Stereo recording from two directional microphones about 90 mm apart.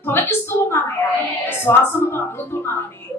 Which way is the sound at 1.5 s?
25° left (ahead or behind).